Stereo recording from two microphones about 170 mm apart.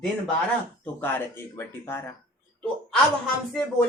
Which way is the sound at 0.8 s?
10° left (ahead or behind).